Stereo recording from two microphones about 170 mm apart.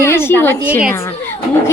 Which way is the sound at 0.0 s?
15° left (ahead or behind).